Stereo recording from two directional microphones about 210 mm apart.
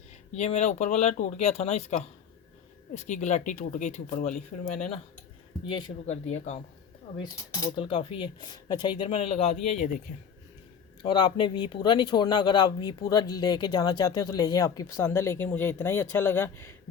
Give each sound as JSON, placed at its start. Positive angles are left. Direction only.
{"t": 0.3, "sound": "speech", "side_deg": 35}
{"t": 7.2, "sound": "speech", "side_deg": 20}
{"t": 11.0, "sound": "speech", "side_deg": 25}